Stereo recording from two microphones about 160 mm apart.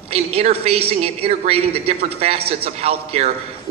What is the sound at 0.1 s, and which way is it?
A man's voice, 40° right (ahead or behind).